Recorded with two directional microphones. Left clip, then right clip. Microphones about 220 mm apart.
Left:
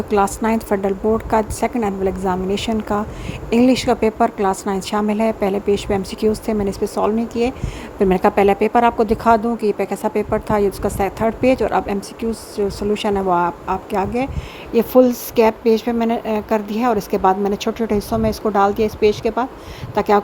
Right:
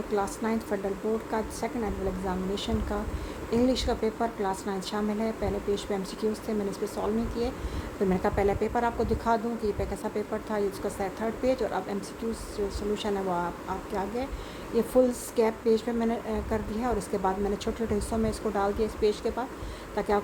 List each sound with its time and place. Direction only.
0.1 s a woman's voice: 35° left (ahead or behind)